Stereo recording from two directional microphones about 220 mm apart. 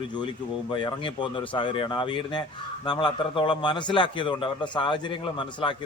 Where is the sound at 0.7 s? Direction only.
20° left (ahead or behind).